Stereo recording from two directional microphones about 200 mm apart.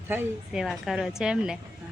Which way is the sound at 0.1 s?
5° right (ahead or behind).